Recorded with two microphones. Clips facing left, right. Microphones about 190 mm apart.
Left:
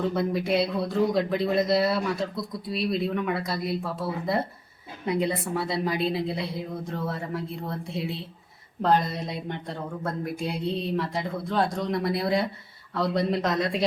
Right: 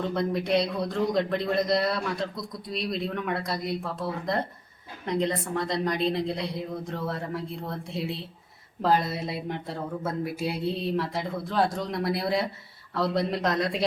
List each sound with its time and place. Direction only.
0.0 s speech: centre (ahead or behind)